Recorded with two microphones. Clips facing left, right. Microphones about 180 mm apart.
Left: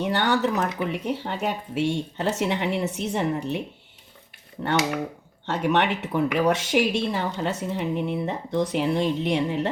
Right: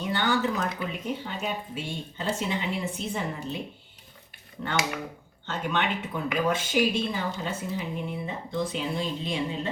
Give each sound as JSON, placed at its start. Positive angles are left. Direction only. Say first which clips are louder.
{"t": 0.0, "sound": "speech", "louder": "left 4 dB", "side_deg": 70}
{"t": 5.5, "sound": "speech", "louder": "left 6 dB", "side_deg": 70}